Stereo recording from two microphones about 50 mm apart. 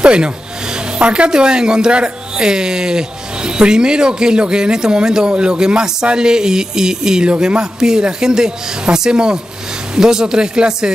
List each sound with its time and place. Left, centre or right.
0.0 s speech: centre